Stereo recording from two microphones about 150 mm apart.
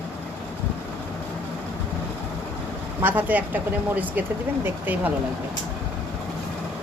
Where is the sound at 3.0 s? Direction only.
10° right (ahead or behind).